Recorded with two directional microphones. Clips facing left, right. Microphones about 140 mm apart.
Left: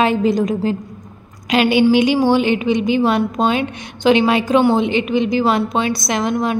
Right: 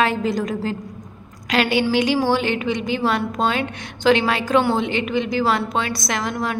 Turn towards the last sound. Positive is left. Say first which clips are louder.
# left 6 dB
turn(degrees=20)  # may be behind; listen again after turning